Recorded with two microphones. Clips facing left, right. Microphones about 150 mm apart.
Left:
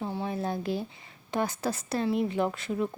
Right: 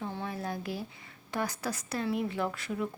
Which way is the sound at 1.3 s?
25° left (ahead or behind).